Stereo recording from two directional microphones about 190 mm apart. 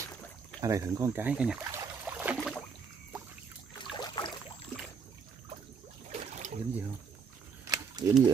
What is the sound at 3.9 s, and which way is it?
Boat, 20° left (ahead or behind).